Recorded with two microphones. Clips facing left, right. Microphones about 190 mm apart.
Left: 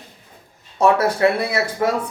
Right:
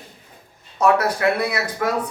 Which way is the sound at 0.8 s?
25° left (ahead or behind).